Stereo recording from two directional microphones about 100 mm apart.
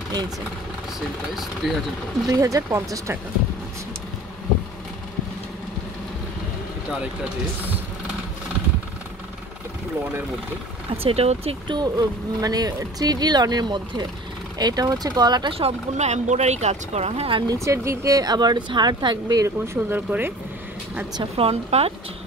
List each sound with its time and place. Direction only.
1.6 s speech: centre (ahead or behind)
2.2 s speech: 35° right (ahead or behind)
11.0 s speech: 80° right
11.6 s speech: 45° right (ahead or behind)
15.5 s speech: 90° right
17.6 s speech: 30° right (ahead or behind)
19.4 s speech: 25° right (ahead or behind)
21.2 s a woman's voice: 75° right (ahead or behind)